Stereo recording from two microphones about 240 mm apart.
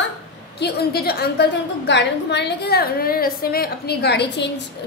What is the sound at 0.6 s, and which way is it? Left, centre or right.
A woman's voice, left.